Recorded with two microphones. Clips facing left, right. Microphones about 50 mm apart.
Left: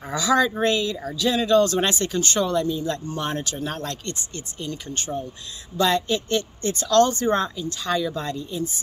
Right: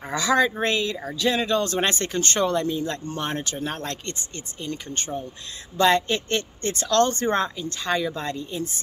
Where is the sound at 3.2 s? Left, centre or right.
Right.